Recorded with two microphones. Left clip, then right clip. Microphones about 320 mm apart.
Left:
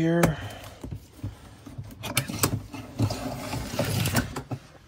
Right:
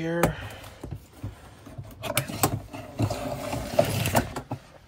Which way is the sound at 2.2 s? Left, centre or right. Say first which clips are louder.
Even; centre.